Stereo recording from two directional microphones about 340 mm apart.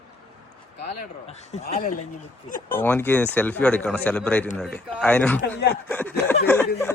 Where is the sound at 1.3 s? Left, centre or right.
Centre.